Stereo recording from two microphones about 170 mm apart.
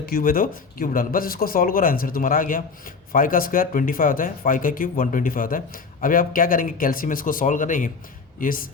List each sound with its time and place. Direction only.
0.0 s speech: 60° left (ahead or behind)